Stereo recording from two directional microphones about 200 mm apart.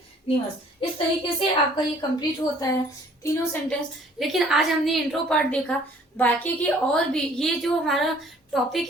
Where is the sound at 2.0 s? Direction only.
20° left (ahead or behind).